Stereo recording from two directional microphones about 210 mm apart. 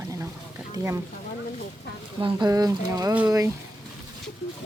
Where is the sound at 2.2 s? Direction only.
20° right (ahead or behind).